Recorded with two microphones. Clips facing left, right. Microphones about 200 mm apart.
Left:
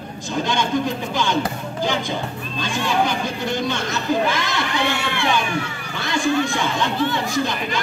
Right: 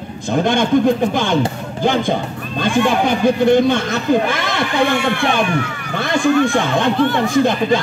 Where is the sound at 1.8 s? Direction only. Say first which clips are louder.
Right 7 dB; 55° right (ahead or behind).